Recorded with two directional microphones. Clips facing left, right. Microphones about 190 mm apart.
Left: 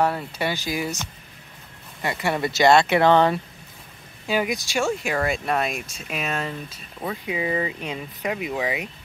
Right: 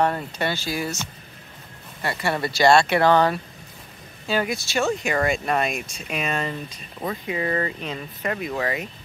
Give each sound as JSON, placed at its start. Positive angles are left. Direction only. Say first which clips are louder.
{"t": 0.0, "sound": "speech", "louder": "even", "side_deg": 10}